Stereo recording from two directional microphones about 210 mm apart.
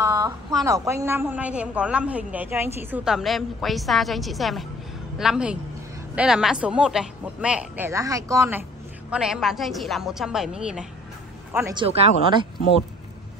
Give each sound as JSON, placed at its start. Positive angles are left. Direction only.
{"t": 0.0, "sound": "a sound", "side_deg": -15}
{"t": 0.7, "sound": "a woman's voice", "side_deg": -15}
{"t": 11.7, "sound": "speech", "side_deg": -25}